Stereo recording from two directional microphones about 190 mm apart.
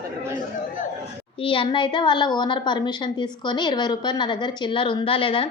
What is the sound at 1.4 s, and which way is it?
A woman's voice, 25° left (ahead or behind).